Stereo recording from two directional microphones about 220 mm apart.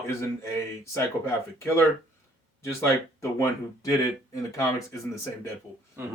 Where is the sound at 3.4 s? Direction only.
15° left (ahead or behind).